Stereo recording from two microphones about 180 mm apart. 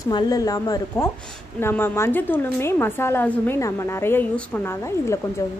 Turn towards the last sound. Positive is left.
turn(degrees=15)  # may be behind; listen again after turning